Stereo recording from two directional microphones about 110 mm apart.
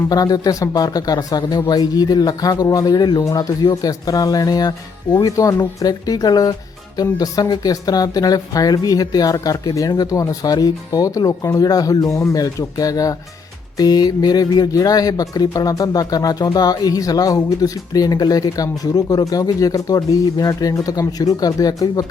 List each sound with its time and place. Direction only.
0.1 s speech: 35° left (ahead or behind)